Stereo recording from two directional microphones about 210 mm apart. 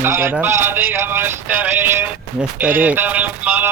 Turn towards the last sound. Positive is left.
turn(degrees=-10)  # may be behind; listen again after turning